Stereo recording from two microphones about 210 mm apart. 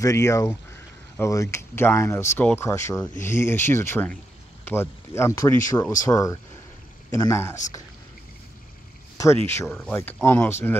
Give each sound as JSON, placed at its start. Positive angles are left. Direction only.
{"t": 0.0, "sound": "speech", "side_deg": 15}
{"t": 9.5, "sound": "speech", "side_deg": 10}